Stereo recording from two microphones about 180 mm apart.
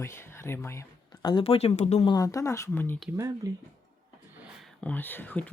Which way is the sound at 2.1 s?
20° left (ahead or behind).